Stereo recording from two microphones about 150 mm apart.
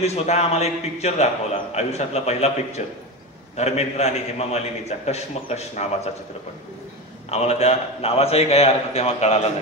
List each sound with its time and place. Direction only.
0.0 s a man's voice: 45° left (ahead or behind)
7.2 s a man's voice: 45° left (ahead or behind)